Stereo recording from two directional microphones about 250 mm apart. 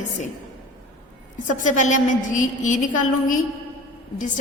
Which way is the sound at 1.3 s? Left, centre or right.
Left.